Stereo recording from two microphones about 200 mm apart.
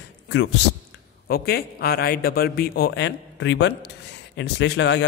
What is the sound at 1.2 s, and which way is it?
A man's voice, 50° left (ahead or behind).